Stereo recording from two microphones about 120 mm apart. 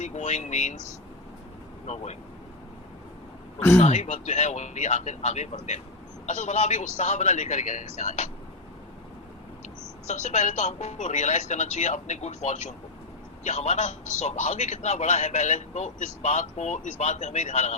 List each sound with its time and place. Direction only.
0.0 s a man's voice: 80° left
3.8 s a man's voice: 70° left (ahead or behind)
10.1 s a man's voice: 80° left